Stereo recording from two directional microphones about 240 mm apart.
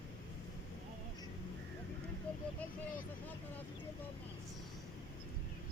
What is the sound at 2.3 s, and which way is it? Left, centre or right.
Vehicle, centre.